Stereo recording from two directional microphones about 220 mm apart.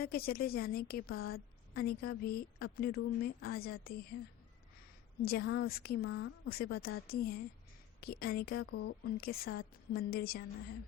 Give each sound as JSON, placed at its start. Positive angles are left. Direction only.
{"t": 0.0, "sound": "a woman's voice", "side_deg": 45}
{"t": 5.2, "sound": "a woman's voice", "side_deg": 45}